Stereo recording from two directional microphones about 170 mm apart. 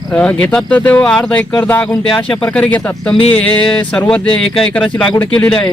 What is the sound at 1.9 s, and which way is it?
Speech, 30° left (ahead or behind).